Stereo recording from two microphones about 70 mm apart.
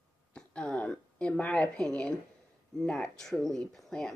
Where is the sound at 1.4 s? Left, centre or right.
Left.